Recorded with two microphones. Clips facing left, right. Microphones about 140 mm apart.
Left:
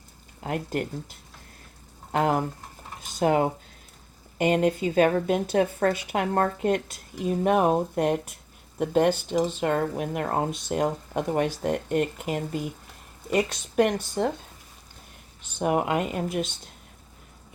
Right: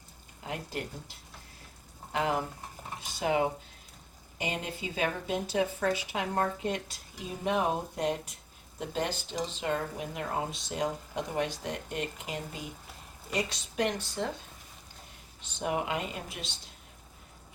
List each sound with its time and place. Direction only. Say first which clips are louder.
0.4 s a woman's voice: left 8 dB; 55° left (ahead or behind)
2.1 s a woman's voice: left 6 dB; 45° left (ahead or behind)
15.4 s a woman's voice: left 7 dB; 50° left (ahead or behind)